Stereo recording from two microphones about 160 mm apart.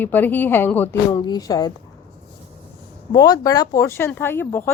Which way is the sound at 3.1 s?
25° left (ahead or behind).